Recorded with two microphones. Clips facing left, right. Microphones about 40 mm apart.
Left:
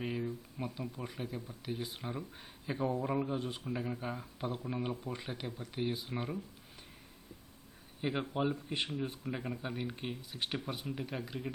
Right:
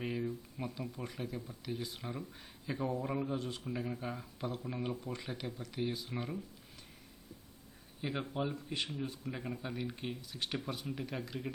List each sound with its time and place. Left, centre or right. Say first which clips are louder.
0.0 s speech: even; centre
8.0 s speech: left 3 dB; centre